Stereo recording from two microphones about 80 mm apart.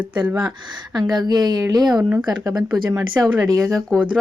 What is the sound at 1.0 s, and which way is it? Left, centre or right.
Speech, right.